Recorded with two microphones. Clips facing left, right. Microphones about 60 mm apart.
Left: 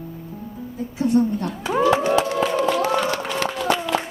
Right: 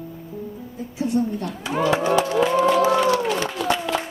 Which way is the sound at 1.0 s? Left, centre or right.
Left.